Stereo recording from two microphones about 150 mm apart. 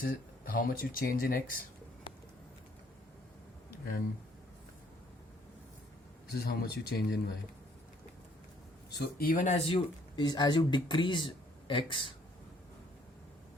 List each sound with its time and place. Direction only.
0.0 s speech: 70° left (ahead or behind)
3.7 s a sound: 80° left
6.2 s speech: 90° left
8.9 s speech: 90° left; by 9.6 s 60° left (ahead or behind)
9.6 s speech: 35° left (ahead or behind)